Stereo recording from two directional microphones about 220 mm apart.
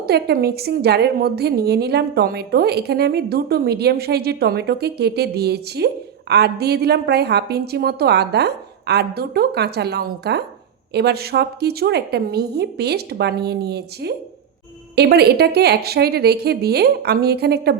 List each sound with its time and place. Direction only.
0.1 s a woman's voice: 45° right (ahead or behind)